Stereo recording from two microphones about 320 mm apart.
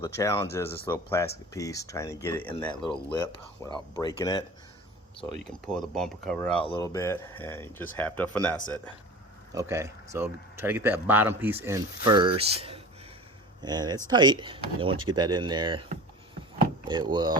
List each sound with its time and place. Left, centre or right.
0.0 s speech: centre
6.6 s speech: centre
9.5 s speech: centre